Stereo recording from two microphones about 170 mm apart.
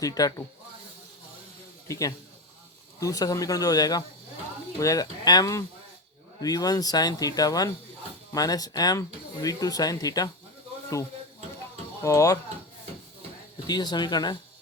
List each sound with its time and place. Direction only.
0.0 s speech: 20° left (ahead or behind)
1.9 s speech: 20° left (ahead or behind)
12.0 s speech: 20° left (ahead or behind)
13.7 s speech: 25° left (ahead or behind)